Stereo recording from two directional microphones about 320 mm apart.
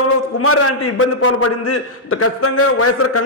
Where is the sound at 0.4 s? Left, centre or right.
Left.